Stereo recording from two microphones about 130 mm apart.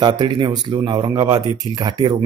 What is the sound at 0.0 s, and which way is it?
A man's voice, 35° right (ahead or behind).